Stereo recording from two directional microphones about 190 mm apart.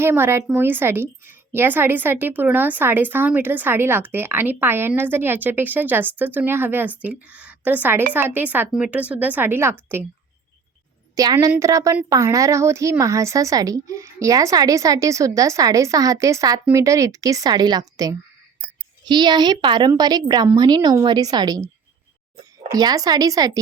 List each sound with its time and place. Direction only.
0.0 s a woman's voice: 10° right (ahead or behind)
11.1 s a woman's voice: 20° right (ahead or behind)
22.7 s a woman's voice: 20° right (ahead or behind)